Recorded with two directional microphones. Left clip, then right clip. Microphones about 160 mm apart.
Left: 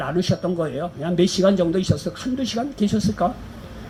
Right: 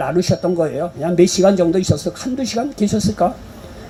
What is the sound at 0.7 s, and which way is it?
Speech, 50° right (ahead or behind).